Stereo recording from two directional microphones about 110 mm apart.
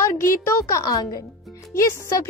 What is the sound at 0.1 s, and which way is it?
Speech, 25° left (ahead or behind).